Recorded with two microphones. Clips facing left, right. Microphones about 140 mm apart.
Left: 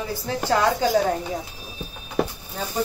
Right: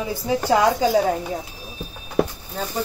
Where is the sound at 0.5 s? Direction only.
15° right (ahead or behind).